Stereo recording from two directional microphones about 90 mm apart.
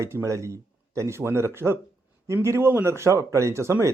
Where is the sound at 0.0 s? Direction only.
30° right (ahead or behind).